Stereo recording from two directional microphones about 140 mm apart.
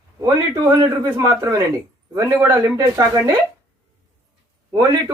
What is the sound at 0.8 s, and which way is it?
Speech, 30° right (ahead or behind).